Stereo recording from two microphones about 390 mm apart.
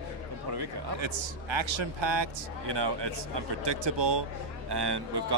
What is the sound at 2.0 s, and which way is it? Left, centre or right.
A man's voice, right.